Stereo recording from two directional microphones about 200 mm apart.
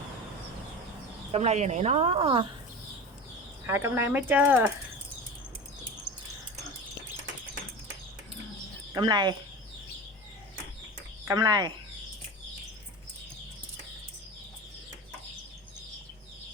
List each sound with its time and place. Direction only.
1.3 s a woman's voice: 35° right (ahead or behind)
3.7 s speech: 10° right (ahead or behind)
8.9 s speech: 20° right (ahead or behind)
11.3 s speech: 20° right (ahead or behind)